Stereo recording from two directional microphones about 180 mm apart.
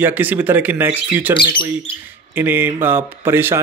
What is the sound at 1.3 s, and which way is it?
Speech, 30° left (ahead or behind).